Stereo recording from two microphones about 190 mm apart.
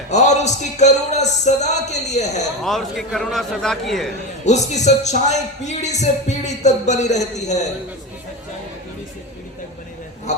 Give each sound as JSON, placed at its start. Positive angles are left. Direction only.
{"t": 0.1, "sound": "speech", "side_deg": 35}
{"t": 2.6, "sound": "a man's voice", "side_deg": 0}
{"t": 4.4, "sound": "speech", "side_deg": 35}